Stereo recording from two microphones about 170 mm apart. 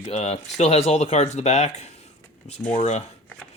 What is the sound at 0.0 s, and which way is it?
Speech, 40° left (ahead or behind).